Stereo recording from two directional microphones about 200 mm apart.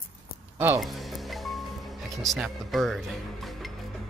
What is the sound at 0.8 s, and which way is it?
Speech, centre (ahead or behind).